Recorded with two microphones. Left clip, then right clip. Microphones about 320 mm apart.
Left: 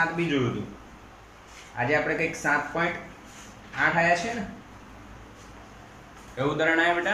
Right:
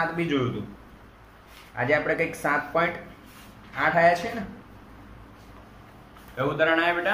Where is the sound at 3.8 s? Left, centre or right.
Centre.